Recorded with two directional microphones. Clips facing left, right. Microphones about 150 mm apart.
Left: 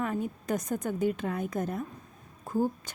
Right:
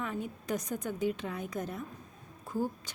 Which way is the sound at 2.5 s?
50° left (ahead or behind).